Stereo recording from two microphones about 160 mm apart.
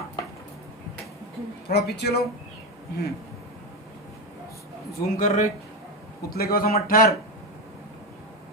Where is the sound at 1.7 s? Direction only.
90° left.